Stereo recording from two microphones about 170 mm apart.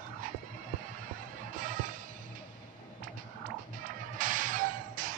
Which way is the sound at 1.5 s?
55° right (ahead or behind).